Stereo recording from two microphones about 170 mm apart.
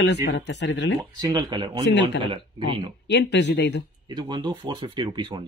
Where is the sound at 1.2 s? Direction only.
25° right (ahead or behind).